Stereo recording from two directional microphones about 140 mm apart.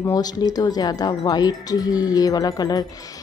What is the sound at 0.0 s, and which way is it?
Speech, 25° left (ahead or behind).